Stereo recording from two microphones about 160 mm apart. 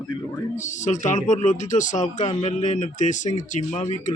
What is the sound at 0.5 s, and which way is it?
Speech, 50° left (ahead or behind).